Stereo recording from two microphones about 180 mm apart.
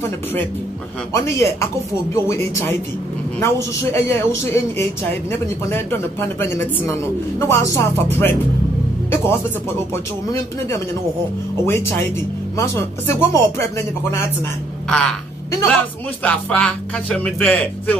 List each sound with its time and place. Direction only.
1.1 s a woman's voice: 15° left (ahead or behind)
5.3 s a woman's voice: 10° left (ahead or behind)
11.6 s a woman's voice: 15° left (ahead or behind)